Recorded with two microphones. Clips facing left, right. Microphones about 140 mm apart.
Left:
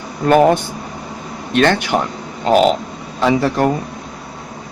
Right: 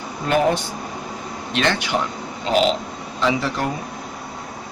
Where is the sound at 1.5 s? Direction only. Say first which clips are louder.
Left 7 dB; 50° left (ahead or behind).